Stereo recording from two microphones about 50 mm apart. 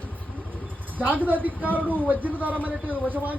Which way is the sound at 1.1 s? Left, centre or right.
Right.